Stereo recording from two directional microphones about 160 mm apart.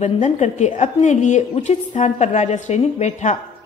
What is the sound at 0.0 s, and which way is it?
A woman's voice, 45° left (ahead or behind).